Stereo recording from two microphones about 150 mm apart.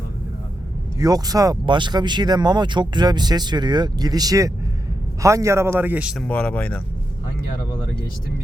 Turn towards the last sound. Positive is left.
turn(degrees=10)  # may be behind; listen again after turning